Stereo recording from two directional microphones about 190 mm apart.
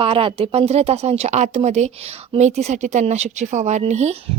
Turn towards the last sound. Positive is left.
turn(degrees=-35)  # may be behind; listen again after turning